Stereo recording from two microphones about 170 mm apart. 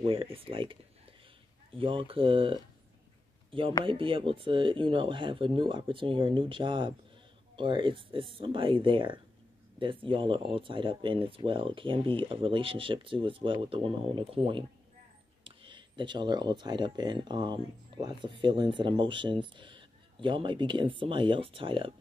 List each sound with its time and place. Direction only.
0.0 s speech: 30° right (ahead or behind)
3.8 s speech: 30° right (ahead or behind)